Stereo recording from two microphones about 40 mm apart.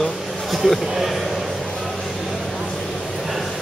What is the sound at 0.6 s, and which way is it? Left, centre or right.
Speech, centre.